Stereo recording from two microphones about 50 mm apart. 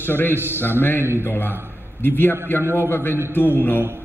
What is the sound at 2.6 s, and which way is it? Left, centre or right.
Speech, right.